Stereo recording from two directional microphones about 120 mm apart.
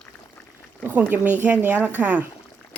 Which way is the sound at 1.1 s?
15° right (ahead or behind).